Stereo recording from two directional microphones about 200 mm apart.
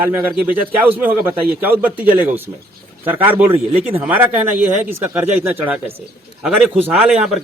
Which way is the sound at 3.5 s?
30° right (ahead or behind).